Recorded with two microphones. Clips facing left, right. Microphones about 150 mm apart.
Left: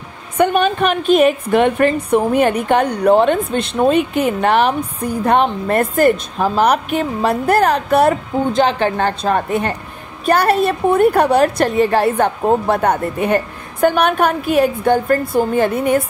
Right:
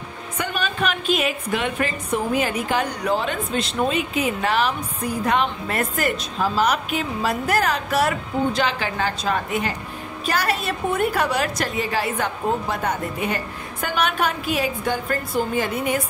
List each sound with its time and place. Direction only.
0.4 s a woman's voice: 60° left (ahead or behind)